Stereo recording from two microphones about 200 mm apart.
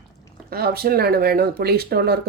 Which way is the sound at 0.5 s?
50° right (ahead or behind).